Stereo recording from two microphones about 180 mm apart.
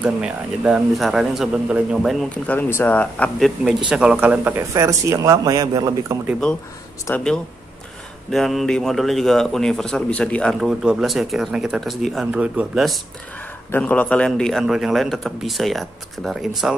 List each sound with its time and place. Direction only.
0.0 s a man's voice: 5° right (ahead or behind)
7.1 s speech: 10° left (ahead or behind)
8.3 s a man's voice: centre (ahead or behind)